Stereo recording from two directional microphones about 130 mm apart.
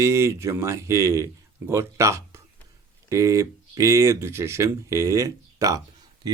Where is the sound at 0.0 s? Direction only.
20° right (ahead or behind).